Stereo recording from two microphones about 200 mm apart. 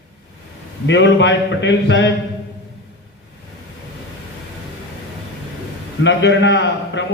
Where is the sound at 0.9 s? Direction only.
65° left (ahead or behind).